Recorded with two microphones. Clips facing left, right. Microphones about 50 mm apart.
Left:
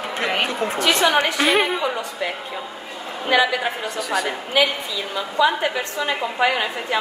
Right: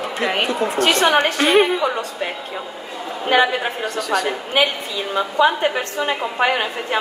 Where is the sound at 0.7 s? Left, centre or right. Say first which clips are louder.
Right 2 dB; right.